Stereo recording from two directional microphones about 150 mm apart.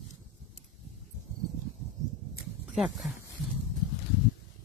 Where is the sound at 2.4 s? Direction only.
Centre (ahead or behind).